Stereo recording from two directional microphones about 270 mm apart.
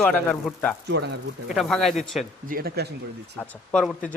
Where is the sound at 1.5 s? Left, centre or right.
Centre.